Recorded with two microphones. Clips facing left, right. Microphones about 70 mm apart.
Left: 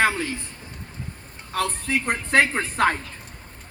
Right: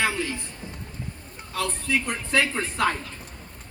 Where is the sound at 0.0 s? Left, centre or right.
Left.